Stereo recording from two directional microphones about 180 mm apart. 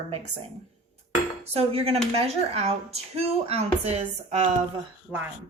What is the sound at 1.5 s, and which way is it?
Speech, 35° right (ahead or behind).